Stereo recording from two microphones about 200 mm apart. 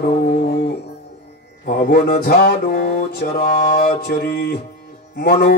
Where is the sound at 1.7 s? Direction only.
50° left (ahead or behind).